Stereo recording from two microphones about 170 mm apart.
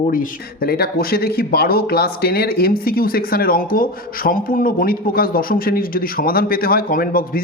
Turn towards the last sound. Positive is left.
turn(degrees=55)  # may be behind; listen again after turning